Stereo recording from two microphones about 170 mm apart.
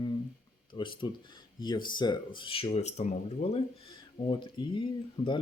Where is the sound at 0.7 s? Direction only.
30° left (ahead or behind).